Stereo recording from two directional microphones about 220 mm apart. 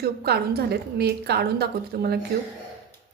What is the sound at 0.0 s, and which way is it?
A woman's voice, 45° right (ahead or behind).